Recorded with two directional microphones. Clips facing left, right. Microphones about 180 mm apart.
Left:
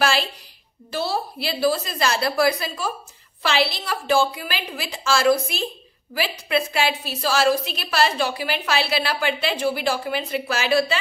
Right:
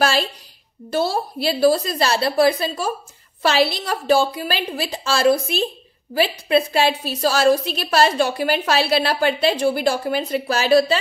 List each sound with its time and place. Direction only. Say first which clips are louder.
0.9 s a woman's voice: right 4 dB; 45° right (ahead or behind)
3.4 s a woman's voice: right 4 dB; 40° right (ahead or behind)